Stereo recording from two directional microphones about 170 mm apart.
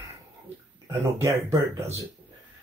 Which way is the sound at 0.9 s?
15° right (ahead or behind).